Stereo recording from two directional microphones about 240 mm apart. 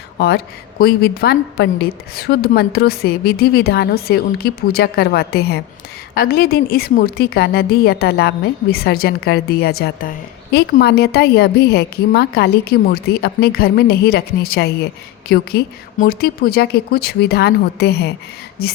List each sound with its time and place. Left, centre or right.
0.2 s a woman's voice: left